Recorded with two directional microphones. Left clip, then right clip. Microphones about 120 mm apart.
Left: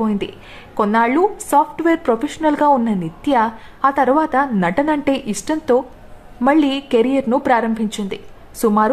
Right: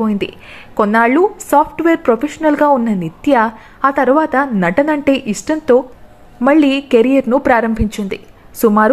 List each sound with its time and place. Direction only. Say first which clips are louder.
0.0 s a woman's voice: right 3 dB; 25° right (ahead or behind)